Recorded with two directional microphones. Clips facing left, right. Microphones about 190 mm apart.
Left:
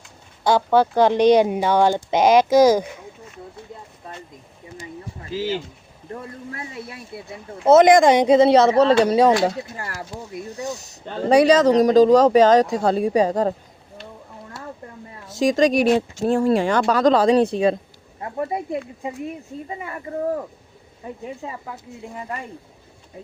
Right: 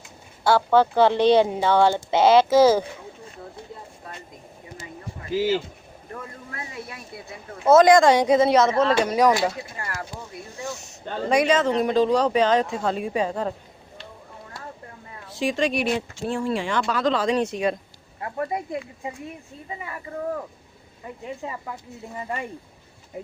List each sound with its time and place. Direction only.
0.4 s speech: 15° left (ahead or behind)
5.3 s speech: 10° right (ahead or behind)
7.6 s speech: 20° left (ahead or behind); by 13.5 s 40° left (ahead or behind)
15.3 s speech: 40° left (ahead or behind); by 18.6 s 25° left (ahead or behind)
19.6 s speech: 40° left (ahead or behind)